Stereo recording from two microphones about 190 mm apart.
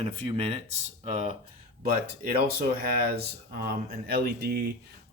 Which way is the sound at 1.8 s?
55° right (ahead or behind).